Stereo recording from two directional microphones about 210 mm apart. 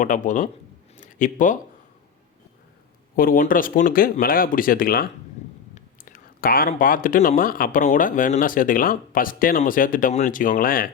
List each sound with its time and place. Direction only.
0.0 s speech: 35° left (ahead or behind)
0.9 s a sound: 35° left (ahead or behind)
3.2 s speech: 40° left (ahead or behind)